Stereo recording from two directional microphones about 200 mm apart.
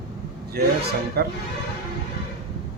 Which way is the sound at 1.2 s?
50° right (ahead or behind).